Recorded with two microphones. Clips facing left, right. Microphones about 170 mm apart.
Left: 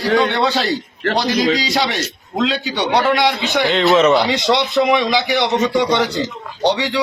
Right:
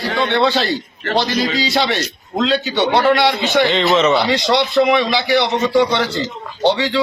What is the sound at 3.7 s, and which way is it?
Speech, centre (ahead or behind).